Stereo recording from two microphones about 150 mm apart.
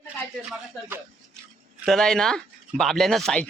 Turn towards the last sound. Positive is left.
turn(degrees=5)  # may be behind; listen again after turning